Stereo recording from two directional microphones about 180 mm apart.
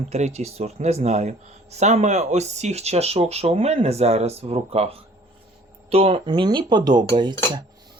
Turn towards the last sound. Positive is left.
turn(degrees=-25)  # may be behind; listen again after turning